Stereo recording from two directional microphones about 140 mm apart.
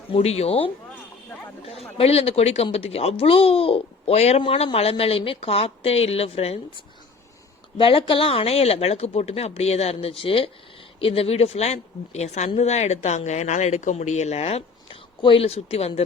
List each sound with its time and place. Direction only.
0.1 s speech: 50° left (ahead or behind)